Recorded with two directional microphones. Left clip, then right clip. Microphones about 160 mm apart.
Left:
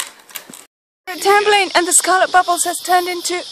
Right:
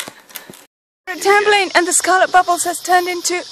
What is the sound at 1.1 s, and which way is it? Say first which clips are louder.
Speech: even; 5° left (ahead or behind).